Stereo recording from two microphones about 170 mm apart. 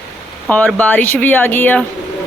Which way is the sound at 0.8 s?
10° left (ahead or behind).